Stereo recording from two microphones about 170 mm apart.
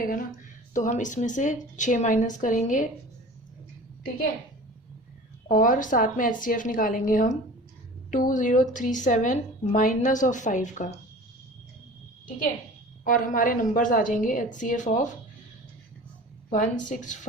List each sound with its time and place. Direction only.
0.7 s a woman's voice: 50° left (ahead or behind)
5.5 s a woman's voice: 50° left (ahead or behind)
13.1 s a woman's voice: 50° left (ahead or behind)
16.5 s a woman's voice: 45° left (ahead or behind)